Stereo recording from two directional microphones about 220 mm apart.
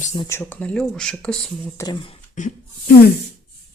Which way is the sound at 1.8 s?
20° left (ahead or behind).